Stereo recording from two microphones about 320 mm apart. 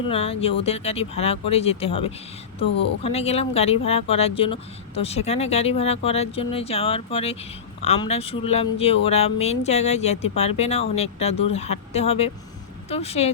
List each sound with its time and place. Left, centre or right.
0.0 s speech: centre